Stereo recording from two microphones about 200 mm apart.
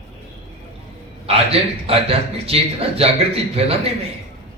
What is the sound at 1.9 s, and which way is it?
A man's voice, 30° right (ahead or behind).